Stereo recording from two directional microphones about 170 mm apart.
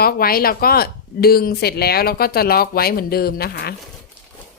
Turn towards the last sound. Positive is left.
turn(degrees=65)  # may be behind; listen again after turning